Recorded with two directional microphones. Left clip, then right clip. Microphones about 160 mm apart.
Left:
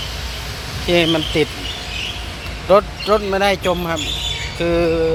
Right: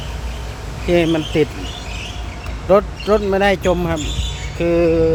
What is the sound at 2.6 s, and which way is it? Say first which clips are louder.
Speech: left 1 dB; 35° right (ahead or behind).